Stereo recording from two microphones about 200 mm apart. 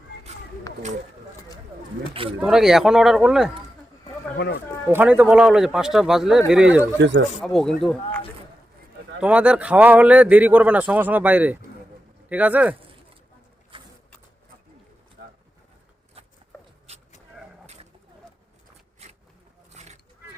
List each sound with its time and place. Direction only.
2.4 s speech: centre (ahead or behind)
4.4 s speech: 55° left (ahead or behind)
4.9 s speech: 10° right (ahead or behind)
9.2 s speech: 5° right (ahead or behind)
13.7 s a sound: 25° right (ahead or behind)
15.2 s pigeon: 50° right (ahead or behind)
19.0 s a sound: 30° right (ahead or behind)